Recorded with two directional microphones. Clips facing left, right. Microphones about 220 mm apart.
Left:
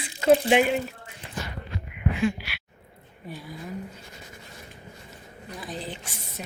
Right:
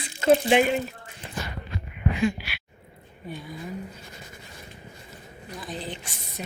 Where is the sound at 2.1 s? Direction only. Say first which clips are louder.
Right 1 dB; centre (ahead or behind).